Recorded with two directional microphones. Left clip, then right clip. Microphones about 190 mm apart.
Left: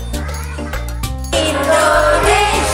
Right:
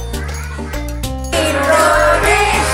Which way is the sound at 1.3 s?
Centre (ahead or behind).